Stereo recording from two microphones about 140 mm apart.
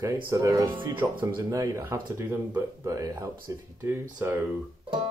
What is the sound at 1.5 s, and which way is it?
Speech, 20° right (ahead or behind).